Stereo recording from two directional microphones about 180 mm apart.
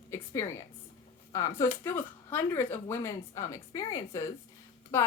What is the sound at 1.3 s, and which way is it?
Speech, 20° left (ahead or behind).